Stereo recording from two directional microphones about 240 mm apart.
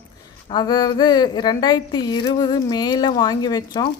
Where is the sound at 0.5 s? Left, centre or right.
Centre.